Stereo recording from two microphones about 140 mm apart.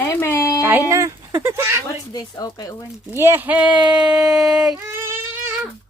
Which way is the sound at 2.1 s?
25° left (ahead or behind).